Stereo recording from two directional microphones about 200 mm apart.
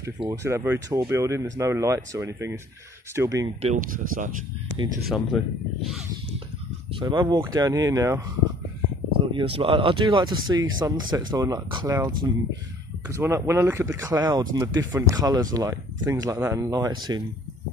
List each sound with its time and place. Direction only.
0.3 s speech: 15° right (ahead or behind)
3.6 s speech: 40° right (ahead or behind)
5.0 s speech: centre (ahead or behind)
7.0 s speech: 20° right (ahead or behind)
9.3 s speech: 25° right (ahead or behind)